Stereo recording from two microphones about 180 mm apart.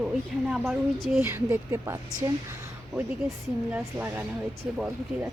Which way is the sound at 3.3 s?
5° right (ahead or behind).